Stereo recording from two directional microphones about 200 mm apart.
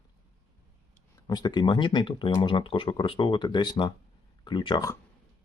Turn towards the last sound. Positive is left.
turn(degrees=20)  # may be behind; listen again after turning